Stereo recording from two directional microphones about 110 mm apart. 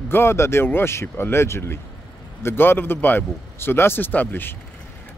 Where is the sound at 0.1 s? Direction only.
20° left (ahead or behind).